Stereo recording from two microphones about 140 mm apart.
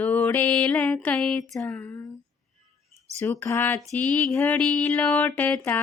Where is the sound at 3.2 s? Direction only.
20° left (ahead or behind).